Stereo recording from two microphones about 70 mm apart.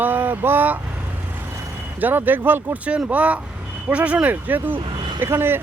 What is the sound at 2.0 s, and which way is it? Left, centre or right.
Speech, right.